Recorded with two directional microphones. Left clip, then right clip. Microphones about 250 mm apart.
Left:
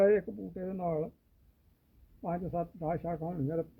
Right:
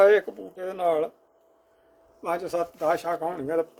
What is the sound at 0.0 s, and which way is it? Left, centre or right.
Speech, centre.